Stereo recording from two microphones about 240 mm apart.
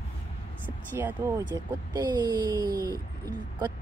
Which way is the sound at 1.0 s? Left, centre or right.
Centre.